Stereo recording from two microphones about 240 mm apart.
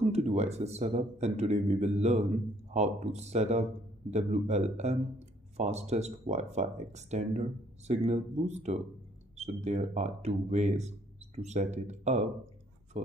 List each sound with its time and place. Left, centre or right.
0.0 s speech: right